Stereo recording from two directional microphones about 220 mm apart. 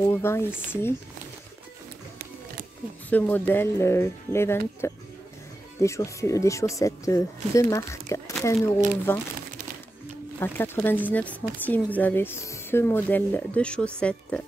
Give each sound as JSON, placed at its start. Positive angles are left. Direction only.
{"t": 0.1, "sound": "speech", "side_deg": 10}
{"t": 3.1, "sound": "speech", "side_deg": 10}
{"t": 10.4, "sound": "speech", "side_deg": 10}